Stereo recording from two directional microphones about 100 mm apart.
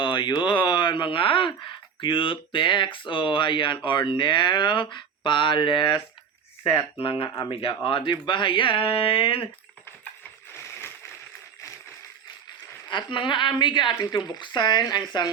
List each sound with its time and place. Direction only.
0.0 s a sound: 55° left (ahead or behind)
0.4 s speech: 50° left (ahead or behind)
8.1 s speech: 50° left (ahead or behind)
12.9 s speech: 50° left (ahead or behind)